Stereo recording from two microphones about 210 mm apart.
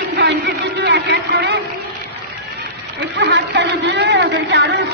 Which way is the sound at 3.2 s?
55° right (ahead or behind).